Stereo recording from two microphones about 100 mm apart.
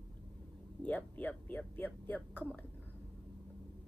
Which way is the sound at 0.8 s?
15° left (ahead or behind).